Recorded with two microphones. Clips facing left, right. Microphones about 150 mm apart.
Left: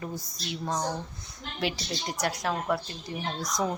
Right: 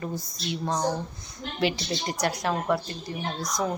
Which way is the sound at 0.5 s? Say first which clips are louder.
Right 3 dB; centre (ahead or behind).